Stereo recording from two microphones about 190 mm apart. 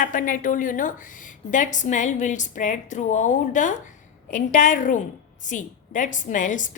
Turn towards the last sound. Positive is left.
turn(degrees=40)  # may be behind; listen again after turning